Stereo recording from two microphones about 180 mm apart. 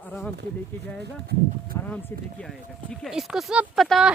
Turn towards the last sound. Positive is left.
turn(degrees=0)  # may be behind; listen again after turning